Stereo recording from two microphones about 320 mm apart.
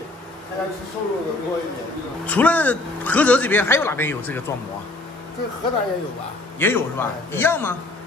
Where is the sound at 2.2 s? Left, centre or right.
Centre.